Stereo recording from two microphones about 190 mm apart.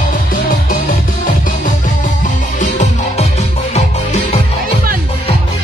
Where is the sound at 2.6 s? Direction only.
40° left (ahead or behind).